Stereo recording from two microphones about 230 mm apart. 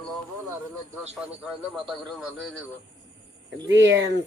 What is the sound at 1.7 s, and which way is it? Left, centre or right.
Speech, centre.